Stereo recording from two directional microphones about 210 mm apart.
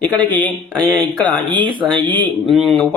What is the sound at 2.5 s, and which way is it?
Speech, centre (ahead or behind).